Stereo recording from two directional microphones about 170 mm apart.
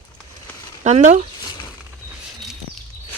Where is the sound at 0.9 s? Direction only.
40° right (ahead or behind).